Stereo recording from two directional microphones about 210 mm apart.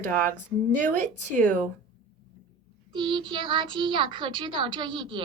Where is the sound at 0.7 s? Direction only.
40° right (ahead or behind).